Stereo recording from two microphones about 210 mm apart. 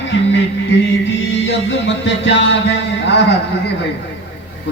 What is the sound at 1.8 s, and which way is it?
Music, 60° left (ahead or behind).